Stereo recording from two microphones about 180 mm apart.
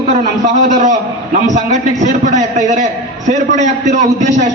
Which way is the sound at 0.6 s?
45° right (ahead or behind).